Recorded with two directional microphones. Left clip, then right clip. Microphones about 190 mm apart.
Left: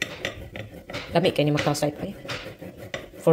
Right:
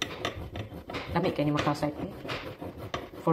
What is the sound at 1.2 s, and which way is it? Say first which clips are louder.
Speech: left 7 dB; 45° left (ahead or behind).